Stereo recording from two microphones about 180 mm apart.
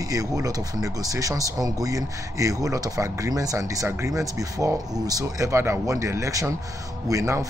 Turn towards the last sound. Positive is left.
turn(degrees=-15)  # may be behind; listen again after turning